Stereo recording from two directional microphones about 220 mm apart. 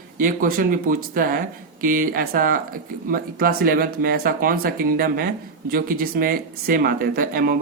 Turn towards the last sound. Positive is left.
turn(degrees=-40)  # may be behind; listen again after turning